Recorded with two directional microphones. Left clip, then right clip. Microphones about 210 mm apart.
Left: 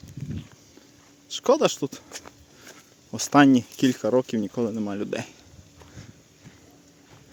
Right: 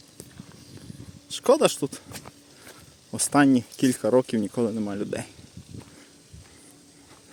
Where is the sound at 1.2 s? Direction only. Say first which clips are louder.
Right 1 dB; centre (ahead or behind).